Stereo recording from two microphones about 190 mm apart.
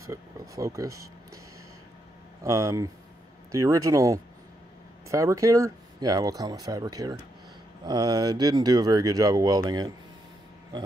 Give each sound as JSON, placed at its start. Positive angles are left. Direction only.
{"t": 0.0, "sound": "speech", "side_deg": -15}
{"t": 2.4, "sound": "speech", "side_deg": -15}
{"t": 10.7, "sound": "a sound", "side_deg": -20}